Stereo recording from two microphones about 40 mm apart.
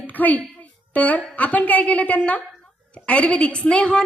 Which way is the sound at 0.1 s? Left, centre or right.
Left.